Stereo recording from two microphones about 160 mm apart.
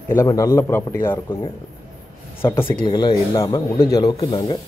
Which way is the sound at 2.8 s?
30° left (ahead or behind).